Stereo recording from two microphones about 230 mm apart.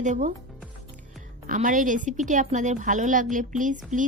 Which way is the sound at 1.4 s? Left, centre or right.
Right.